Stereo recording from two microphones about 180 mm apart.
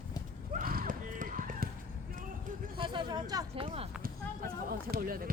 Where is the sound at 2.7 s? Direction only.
25° right (ahead or behind).